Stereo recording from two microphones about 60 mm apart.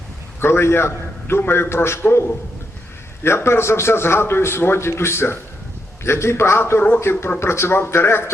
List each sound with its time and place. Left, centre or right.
0.3 s a man's voice: left